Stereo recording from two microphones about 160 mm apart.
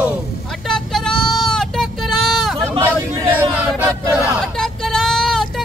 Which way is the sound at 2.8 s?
15° right (ahead or behind).